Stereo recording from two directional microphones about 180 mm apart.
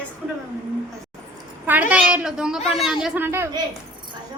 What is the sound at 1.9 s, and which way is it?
Speech, 5° right (ahead or behind).